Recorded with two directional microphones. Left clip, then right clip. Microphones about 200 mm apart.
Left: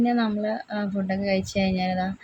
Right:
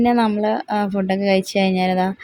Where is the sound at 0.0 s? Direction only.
35° right (ahead or behind).